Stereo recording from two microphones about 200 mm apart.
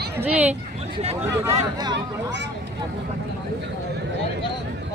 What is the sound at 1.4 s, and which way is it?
Speech, 15° right (ahead or behind).